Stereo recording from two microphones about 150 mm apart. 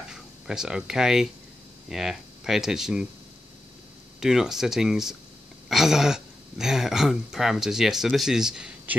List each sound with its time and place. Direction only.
0.1 s speech: 5° right (ahead or behind)
4.2 s speech: 5° right (ahead or behind)